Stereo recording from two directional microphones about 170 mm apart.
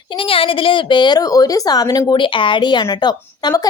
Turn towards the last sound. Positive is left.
turn(degrees=20)  # may be behind; listen again after turning